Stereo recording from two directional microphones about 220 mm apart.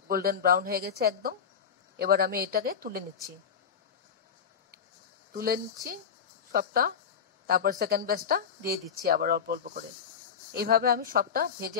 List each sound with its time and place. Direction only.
0.1 s speech: 40° right (ahead or behind)
5.3 s a man's voice: 40° right (ahead or behind)